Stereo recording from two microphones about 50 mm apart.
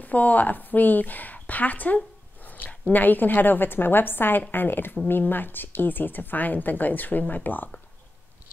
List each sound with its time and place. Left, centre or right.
0.0 s a woman's voice: left